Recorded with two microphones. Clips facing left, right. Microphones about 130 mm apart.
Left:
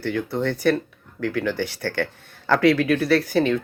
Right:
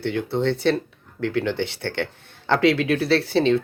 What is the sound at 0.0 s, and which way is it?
Speech, 25° right (ahead or behind).